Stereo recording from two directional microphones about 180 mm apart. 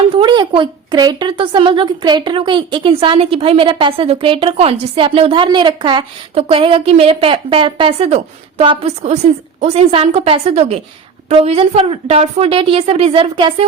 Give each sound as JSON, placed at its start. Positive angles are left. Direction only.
{"t": 0.1, "sound": "a woman's voice", "side_deg": -25}